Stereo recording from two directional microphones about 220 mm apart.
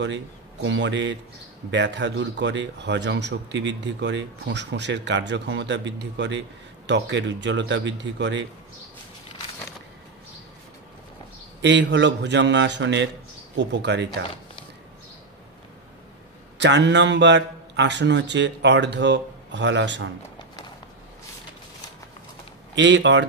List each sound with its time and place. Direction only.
0.0 s a man's voice: 55° right (ahead or behind)
11.6 s a man's voice: 55° right (ahead or behind)
16.5 s a man's voice: 55° right (ahead or behind)
22.8 s speech: 55° right (ahead or behind)